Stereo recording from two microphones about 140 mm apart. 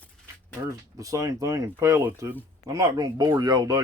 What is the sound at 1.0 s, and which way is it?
Speech, 25° right (ahead or behind).